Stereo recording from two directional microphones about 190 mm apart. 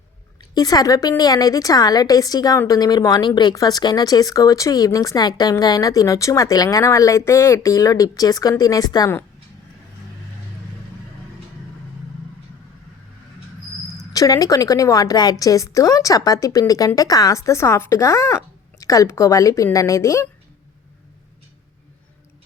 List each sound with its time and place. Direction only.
0.5 s a woman's voice: 20° left (ahead or behind)
14.1 s a woman's voice: 20° left (ahead or behind)